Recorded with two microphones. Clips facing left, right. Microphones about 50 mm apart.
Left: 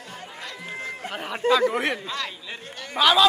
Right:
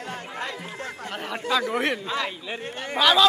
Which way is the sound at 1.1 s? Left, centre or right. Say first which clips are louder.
Right 1 dB; centre.